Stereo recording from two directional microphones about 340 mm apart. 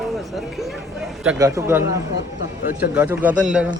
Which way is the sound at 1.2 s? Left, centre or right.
Centre.